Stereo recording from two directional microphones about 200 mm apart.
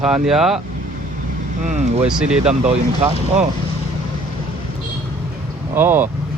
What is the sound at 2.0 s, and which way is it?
Speech, 5° right (ahead or behind).